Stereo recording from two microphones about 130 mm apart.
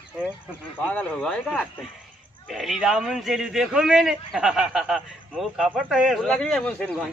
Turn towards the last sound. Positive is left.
turn(degrees=10)  # may be behind; listen again after turning